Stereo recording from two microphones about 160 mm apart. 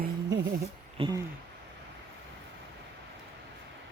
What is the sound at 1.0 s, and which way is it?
Speech, 35° right (ahead or behind).